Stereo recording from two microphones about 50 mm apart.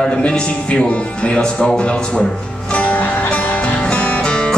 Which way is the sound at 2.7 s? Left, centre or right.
Left.